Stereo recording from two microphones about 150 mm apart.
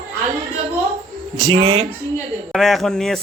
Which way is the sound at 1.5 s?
30° right (ahead or behind).